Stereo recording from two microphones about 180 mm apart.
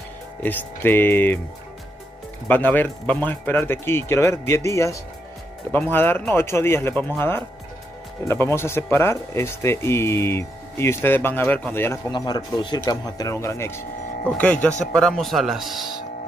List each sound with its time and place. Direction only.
0.4 s speech: 10° left (ahead or behind)
2.4 s speech: 10° left (ahead or behind)
12.1 s speech: 25° left (ahead or behind); by 15.9 s centre (ahead or behind)